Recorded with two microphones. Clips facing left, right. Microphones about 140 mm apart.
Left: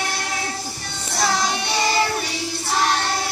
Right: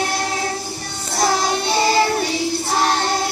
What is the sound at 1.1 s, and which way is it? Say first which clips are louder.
Child singing: right 3 dB; 45° right (ahead or behind).